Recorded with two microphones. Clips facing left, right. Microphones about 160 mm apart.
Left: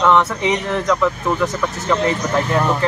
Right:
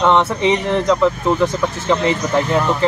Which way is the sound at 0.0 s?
25° right (ahead or behind).